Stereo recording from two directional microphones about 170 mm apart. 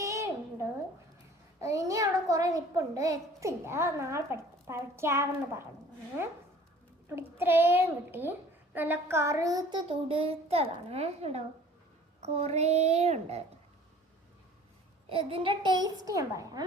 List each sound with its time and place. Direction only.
0.0 s a sound: 20° right (ahead or behind)
1.6 s a child's voice: 20° right (ahead or behind); by 13.4 s 40° right (ahead or behind)
15.1 s a woman's voice: 30° right (ahead or behind)